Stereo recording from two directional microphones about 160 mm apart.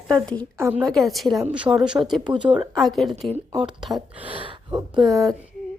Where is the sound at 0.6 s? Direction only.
10° right (ahead or behind).